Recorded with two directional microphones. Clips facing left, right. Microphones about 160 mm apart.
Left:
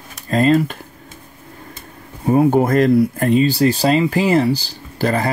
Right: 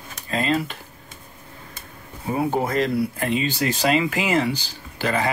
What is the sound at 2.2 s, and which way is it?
Speech, 50° left (ahead or behind).